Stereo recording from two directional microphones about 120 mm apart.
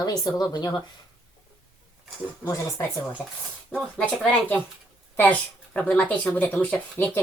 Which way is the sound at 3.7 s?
10° left (ahead or behind).